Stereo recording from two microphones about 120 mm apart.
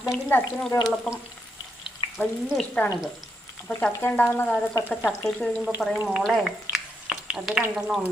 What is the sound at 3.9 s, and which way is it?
Speech, 15° left (ahead or behind).